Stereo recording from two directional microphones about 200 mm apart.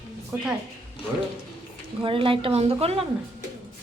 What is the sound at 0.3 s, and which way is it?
Speech, 10° right (ahead or behind).